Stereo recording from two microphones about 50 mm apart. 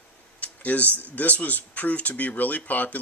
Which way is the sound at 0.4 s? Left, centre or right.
Left.